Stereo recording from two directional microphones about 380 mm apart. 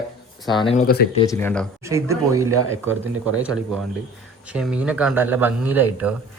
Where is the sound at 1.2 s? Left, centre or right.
Centre.